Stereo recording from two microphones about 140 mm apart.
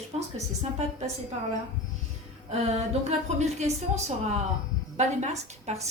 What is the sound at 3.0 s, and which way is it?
A woman's voice, 55° right (ahead or behind).